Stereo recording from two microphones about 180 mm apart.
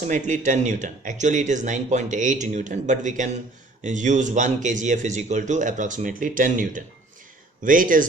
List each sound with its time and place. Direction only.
0.0 s speech: 45° right (ahead or behind)